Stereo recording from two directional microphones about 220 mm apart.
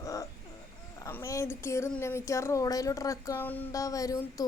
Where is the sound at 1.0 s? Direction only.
15° left (ahead or behind).